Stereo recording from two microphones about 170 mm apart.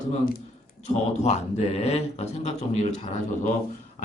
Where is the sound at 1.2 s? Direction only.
40° left (ahead or behind).